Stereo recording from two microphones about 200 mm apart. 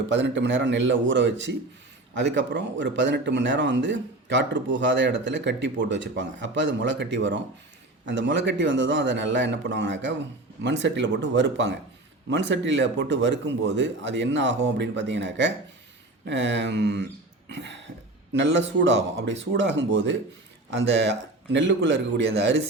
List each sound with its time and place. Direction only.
0.1 s speech: 65° right (ahead or behind)